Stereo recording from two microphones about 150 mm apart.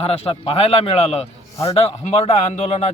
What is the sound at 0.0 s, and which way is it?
A man's voice, 40° left (ahead or behind).